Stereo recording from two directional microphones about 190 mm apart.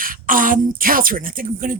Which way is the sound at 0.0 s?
45° right (ahead or behind).